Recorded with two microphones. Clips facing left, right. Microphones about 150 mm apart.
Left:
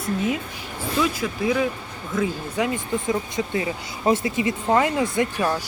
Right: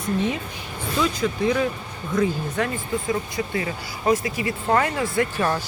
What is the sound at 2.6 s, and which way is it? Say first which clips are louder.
Speech: left 1 dB; 20° left (ahead or behind).